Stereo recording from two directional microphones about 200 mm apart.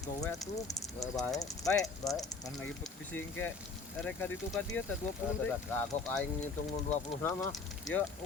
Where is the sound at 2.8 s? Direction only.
10° left (ahead or behind).